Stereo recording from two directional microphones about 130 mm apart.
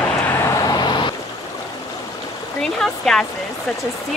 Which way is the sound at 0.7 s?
35° left (ahead or behind).